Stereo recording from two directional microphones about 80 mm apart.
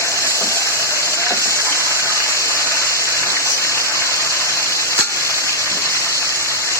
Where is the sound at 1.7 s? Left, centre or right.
Right.